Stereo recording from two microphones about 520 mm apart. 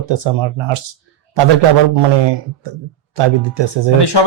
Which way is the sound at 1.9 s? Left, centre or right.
Right.